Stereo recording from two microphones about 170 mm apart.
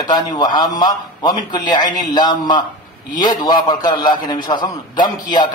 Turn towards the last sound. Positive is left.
turn(degrees=25)  # may be behind; listen again after turning